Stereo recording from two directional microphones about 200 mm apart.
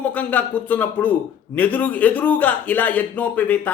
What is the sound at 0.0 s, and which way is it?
A man's voice, 10° left (ahead or behind).